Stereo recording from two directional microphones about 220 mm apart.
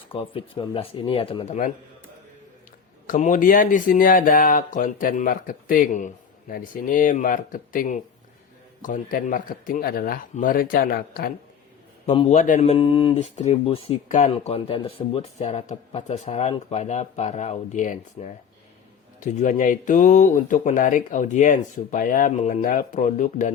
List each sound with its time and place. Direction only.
0.1 s speech: 25° left (ahead or behind)
3.1 s speech: 35° left (ahead or behind)
12.0 s speech: 25° left (ahead or behind)